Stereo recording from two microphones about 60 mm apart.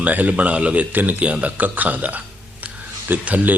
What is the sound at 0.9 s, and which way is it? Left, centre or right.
A man's voice, right.